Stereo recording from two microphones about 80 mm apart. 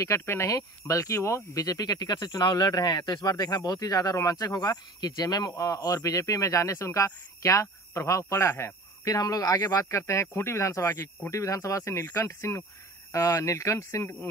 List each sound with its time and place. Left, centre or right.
0.0 s speech: left
9.0 s speech: left